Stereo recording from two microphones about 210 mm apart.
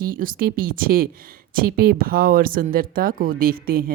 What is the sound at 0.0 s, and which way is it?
A woman's voice, 40° right (ahead or behind).